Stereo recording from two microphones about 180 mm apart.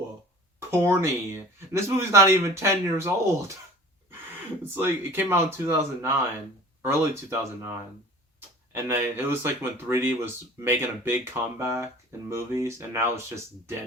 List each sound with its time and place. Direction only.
0.7 s speech: 15° right (ahead or behind)
4.6 s speech: 10° right (ahead or behind)
8.7 s speech: 15° right (ahead or behind)